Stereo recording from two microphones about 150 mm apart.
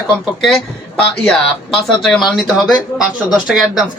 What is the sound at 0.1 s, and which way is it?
Speech, 5° left (ahead or behind).